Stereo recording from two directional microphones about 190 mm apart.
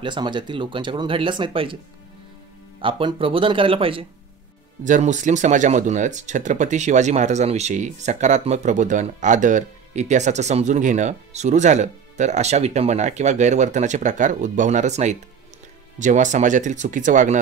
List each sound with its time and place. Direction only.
0.0 s speech: 25° right (ahead or behind)
2.8 s speech: 25° right (ahead or behind)
4.8 s speech: 40° right (ahead or behind)